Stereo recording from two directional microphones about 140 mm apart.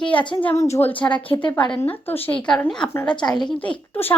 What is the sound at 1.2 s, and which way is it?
Speech, 40° left (ahead or behind).